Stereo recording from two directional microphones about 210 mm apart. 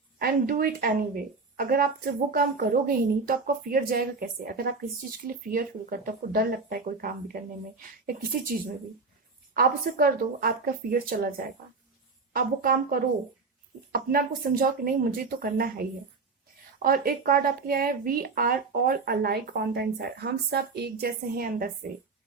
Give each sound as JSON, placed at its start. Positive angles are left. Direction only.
{"t": 0.2, "sound": "speech", "side_deg": -45}